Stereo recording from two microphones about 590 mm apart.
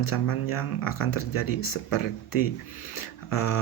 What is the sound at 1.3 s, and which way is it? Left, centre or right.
Speech, left.